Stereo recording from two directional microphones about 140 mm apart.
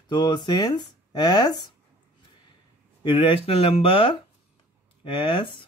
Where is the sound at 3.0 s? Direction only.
35° left (ahead or behind).